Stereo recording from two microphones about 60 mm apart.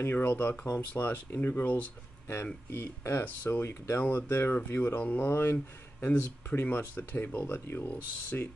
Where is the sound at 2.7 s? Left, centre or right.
Left.